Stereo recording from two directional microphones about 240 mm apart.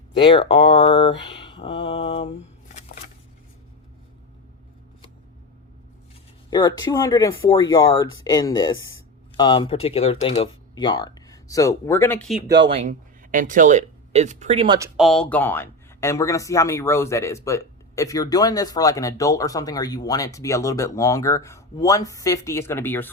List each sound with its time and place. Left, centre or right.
0.2 s speech: left
6.5 s speech: centre
12.6 s speech: right
14.9 s speech: centre